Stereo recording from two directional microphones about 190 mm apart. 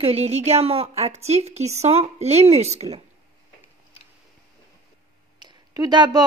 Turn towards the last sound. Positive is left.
turn(degrees=-20)  # may be behind; listen again after turning